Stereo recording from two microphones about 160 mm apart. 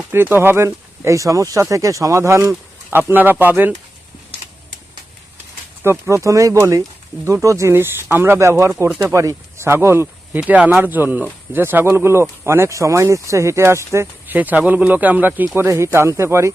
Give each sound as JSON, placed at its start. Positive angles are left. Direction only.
{"t": 0.1, "sound": "speech", "side_deg": -15}
{"t": 5.8, "sound": "speech", "side_deg": -15}